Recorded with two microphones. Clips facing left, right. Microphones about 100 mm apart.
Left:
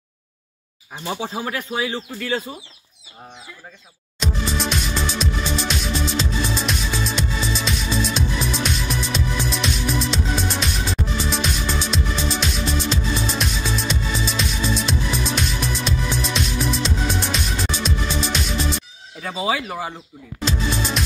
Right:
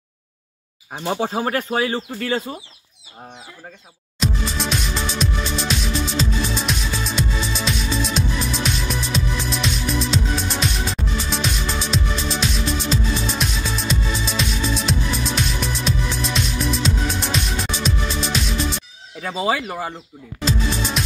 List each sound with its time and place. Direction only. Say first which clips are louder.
0.9 s speech: right 4 dB; 40° right (ahead or behind)
4.2 s music: even; centre (ahead or behind)
19.2 s speech: right 2 dB; centre (ahead or behind)
20.4 s music: right 1 dB; centre (ahead or behind)